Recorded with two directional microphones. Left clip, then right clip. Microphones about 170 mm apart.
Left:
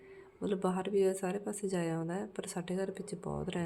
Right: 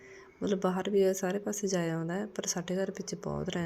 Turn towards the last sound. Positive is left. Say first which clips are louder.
# right 3 dB
turn(degrees=-10)  # may be behind; listen again after turning